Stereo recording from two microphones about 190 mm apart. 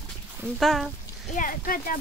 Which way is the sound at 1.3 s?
45° left (ahead or behind).